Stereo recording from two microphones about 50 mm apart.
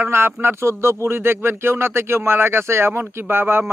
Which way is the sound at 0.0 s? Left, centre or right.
Right.